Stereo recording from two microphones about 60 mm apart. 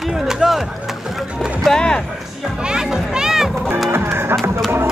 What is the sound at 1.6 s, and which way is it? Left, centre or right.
Speech, centre.